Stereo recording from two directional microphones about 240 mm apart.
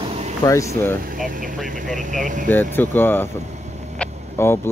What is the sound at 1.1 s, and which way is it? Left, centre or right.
Speech, right.